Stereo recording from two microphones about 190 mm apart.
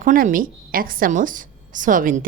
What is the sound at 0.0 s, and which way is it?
A woman's voice, 45° right (ahead or behind).